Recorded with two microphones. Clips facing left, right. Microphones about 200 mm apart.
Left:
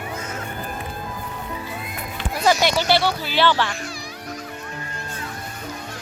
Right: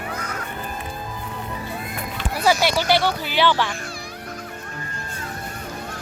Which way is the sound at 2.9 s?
15° right (ahead or behind).